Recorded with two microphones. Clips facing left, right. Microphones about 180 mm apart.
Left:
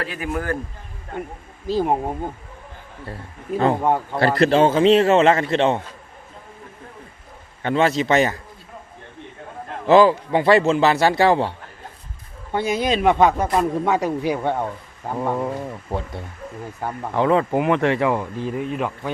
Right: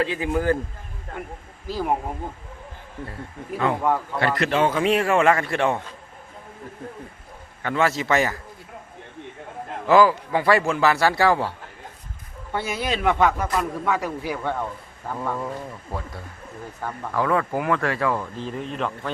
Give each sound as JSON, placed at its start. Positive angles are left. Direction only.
{"t": 0.0, "sound": "a man's voice", "side_deg": -20}
{"t": 1.6, "sound": "a man's voice", "side_deg": 25}
{"t": 3.6, "sound": "a man's voice", "side_deg": 30}
{"t": 7.6, "sound": "a man's voice", "side_deg": 20}
{"t": 9.8, "sound": "a man's voice", "side_deg": 25}